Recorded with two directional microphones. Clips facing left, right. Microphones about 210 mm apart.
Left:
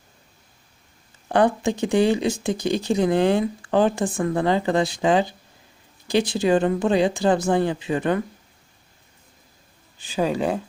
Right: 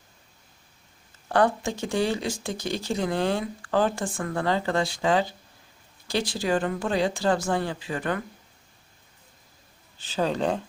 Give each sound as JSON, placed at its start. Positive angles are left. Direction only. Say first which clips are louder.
{"t": 1.3, "sound": "speech", "louder": "left 4 dB", "side_deg": 20}
{"t": 10.0, "sound": "speech", "louder": "left 3 dB", "side_deg": 10}